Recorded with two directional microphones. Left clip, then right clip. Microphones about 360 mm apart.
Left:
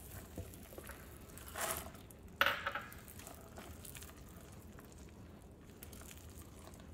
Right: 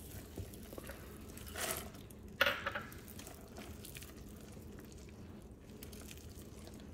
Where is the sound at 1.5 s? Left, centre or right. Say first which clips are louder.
Even; centre.